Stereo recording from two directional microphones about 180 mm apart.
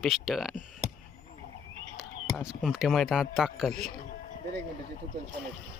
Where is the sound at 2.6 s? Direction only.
Centre (ahead or behind).